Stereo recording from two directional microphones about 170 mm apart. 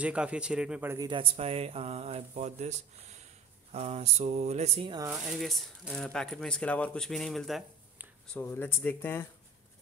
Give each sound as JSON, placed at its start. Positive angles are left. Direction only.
{"t": 0.0, "sound": "speech", "side_deg": -5}
{"t": 1.0, "sound": "speech", "side_deg": -30}
{"t": 5.1, "sound": "speech", "side_deg": 0}
{"t": 8.3, "sound": "speech", "side_deg": 10}